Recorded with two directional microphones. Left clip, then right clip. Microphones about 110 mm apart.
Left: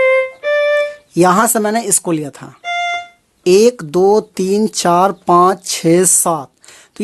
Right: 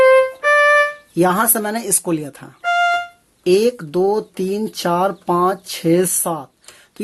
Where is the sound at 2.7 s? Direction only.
25° left (ahead or behind).